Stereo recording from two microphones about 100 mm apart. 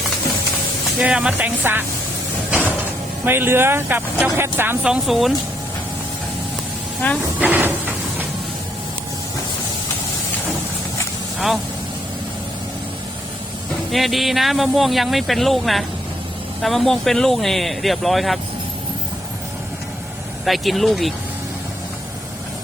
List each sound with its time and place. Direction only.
0.9 s speech: 10° right (ahead or behind)
1.4 s speech: 20° right (ahead or behind)
2.5 s sliding door: 15° right (ahead or behind)
3.2 s speech: 25° right (ahead or behind)
4.8 s speech: 5° right (ahead or behind)
7.3 s a sound: 15° right (ahead or behind)
11.3 s speech: 5° right (ahead or behind)
13.9 s speech: centre (ahead or behind)
20.4 s speech: centre (ahead or behind)